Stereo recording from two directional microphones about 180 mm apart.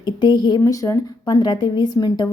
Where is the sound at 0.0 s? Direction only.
25° left (ahead or behind).